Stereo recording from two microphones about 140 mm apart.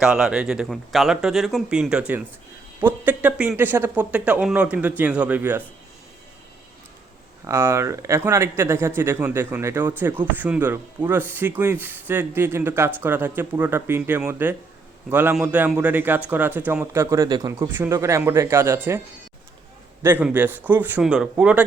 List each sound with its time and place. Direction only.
0.0 s speech: 5° right (ahead or behind)
7.4 s a man's voice: 20° right (ahead or behind)